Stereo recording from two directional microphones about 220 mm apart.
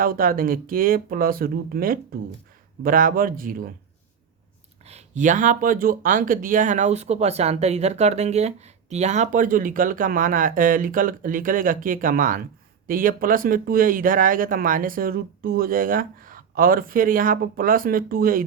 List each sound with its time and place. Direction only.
0.0 s speech: 40° right (ahead or behind)
4.9 s speech: 30° right (ahead or behind)